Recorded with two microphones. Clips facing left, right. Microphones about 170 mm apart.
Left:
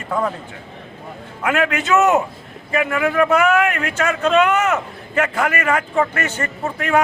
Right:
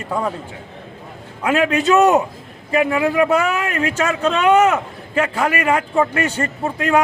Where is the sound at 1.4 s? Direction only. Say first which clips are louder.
Right 3 dB; 30° right (ahead or behind).